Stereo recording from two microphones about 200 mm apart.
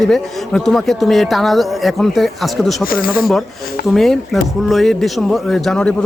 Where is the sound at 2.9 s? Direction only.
45° left (ahead or behind).